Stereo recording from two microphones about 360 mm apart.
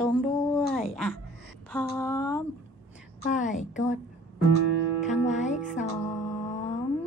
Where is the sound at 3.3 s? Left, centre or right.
Left.